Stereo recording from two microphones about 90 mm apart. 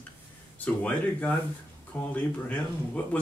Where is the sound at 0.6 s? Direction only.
15° left (ahead or behind).